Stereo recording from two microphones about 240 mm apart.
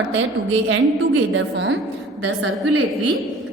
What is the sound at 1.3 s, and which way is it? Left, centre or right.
A woman's voice, right.